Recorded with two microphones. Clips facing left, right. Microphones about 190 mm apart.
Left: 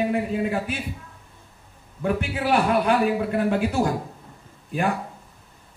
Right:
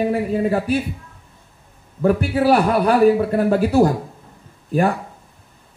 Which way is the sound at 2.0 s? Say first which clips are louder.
Right 8 dB; 40° right (ahead or behind).